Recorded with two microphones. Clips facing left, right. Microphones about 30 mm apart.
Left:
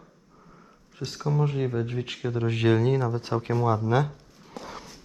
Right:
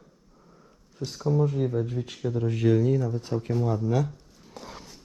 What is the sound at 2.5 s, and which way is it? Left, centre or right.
Speech, left.